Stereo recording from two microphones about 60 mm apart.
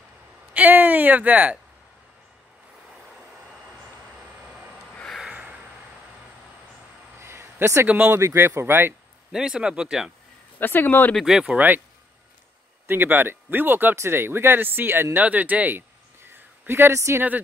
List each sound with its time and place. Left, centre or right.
0.5 s speech: right
5.3 s vehicle: right
7.2 s a sound: right
8.2 s speech: right
9.3 s speech: centre
10.6 s speech: left
11.2 s speech: centre
11.5 s speech: right
12.8 s speech: right
13.9 s speech: right
16.6 s speech: right